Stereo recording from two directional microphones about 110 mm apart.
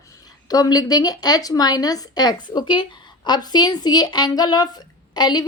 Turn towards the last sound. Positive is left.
turn(degrees=40)  # may be behind; listen again after turning